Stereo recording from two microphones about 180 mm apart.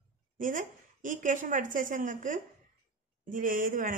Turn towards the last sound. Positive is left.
turn(degrees=-50)  # may be behind; listen again after turning